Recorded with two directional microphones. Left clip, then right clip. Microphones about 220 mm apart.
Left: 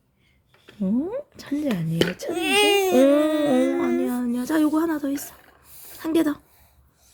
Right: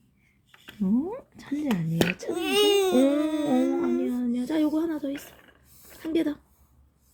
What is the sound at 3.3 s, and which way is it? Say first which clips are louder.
Humming: left 5 dB; 25° left (ahead or behind).